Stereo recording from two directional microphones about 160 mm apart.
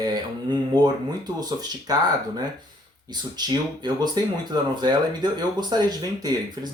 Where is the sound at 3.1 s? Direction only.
25° right (ahead or behind).